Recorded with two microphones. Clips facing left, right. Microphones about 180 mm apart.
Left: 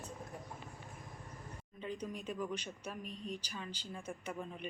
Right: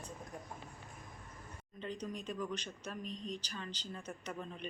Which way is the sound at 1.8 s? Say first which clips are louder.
Even; 10° left (ahead or behind).